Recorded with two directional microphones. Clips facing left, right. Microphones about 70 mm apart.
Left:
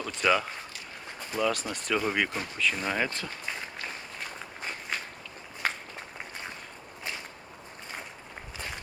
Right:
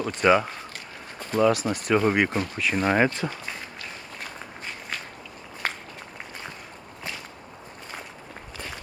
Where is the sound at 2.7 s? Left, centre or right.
Right.